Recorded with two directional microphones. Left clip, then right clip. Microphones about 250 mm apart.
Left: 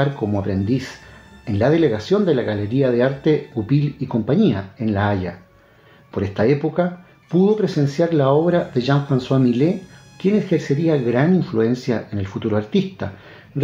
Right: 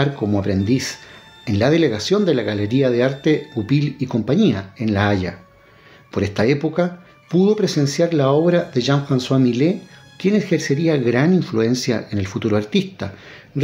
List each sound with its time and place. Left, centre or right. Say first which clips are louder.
0.0 s speech: right 1 dB; right